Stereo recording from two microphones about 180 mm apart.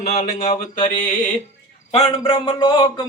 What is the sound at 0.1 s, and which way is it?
Speech, 40° left (ahead or behind).